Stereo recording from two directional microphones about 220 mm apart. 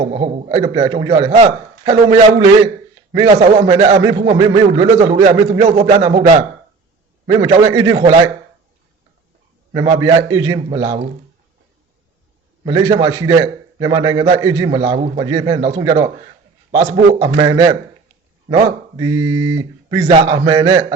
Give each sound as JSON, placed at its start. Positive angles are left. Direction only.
{"t": 0.0, "sound": "a man's voice", "side_deg": -30}
{"t": 0.4, "sound": "a man's voice", "side_deg": -15}
{"t": 9.7, "sound": "a man's voice", "side_deg": -20}
{"t": 12.6, "sound": "a man's voice", "side_deg": -15}
{"t": 15.2, "sound": "a man's voice", "side_deg": -20}